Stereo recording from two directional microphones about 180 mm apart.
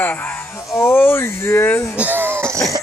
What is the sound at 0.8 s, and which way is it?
Speech, 10° left (ahead or behind).